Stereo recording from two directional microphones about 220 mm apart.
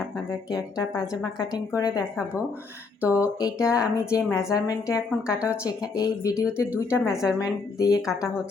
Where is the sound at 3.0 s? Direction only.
5° right (ahead or behind).